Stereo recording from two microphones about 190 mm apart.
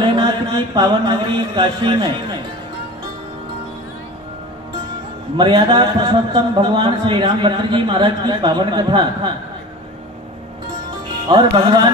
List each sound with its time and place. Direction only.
0.0 s a man's voice: 25° right (ahead or behind)
5.4 s a man's voice: 25° right (ahead or behind)
11.2 s a man's voice: 25° right (ahead or behind)